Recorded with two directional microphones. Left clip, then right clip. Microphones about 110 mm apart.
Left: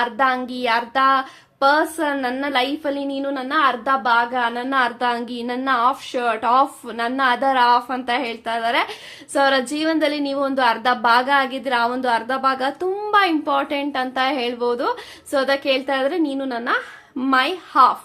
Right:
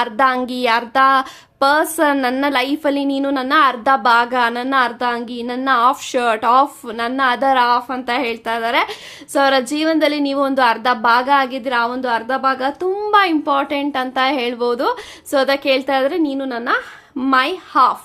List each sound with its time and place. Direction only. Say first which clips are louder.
0.0 s a woman's voice: right 3 dB; 50° right (ahead or behind); by 5.9 s 30° right (ahead or behind)
5.9 s a woman's voice: right 4 dB; 45° right (ahead or behind)
6.4 s a woman's voice: right 2 dB; 30° right (ahead or behind)